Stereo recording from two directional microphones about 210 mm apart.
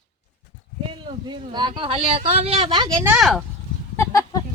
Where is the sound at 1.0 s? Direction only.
20° right (ahead or behind).